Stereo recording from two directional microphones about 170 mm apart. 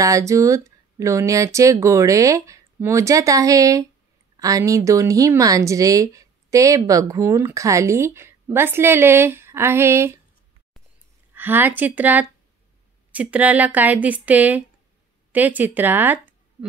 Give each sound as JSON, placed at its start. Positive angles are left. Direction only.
{"t": 0.0, "sound": "speech", "side_deg": -20}
{"t": 11.3, "sound": "speech", "side_deg": -10}